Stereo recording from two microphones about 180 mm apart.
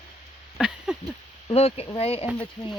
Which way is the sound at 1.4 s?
35° left (ahead or behind).